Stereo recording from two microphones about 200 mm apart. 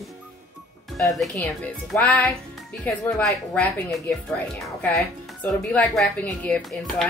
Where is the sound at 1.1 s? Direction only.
Centre (ahead or behind).